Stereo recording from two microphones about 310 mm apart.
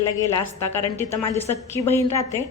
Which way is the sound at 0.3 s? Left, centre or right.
Centre.